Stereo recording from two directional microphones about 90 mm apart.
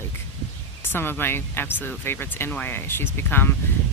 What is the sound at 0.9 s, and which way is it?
Speech, 25° left (ahead or behind).